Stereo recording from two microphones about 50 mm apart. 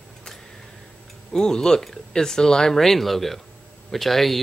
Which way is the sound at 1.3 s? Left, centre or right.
Centre.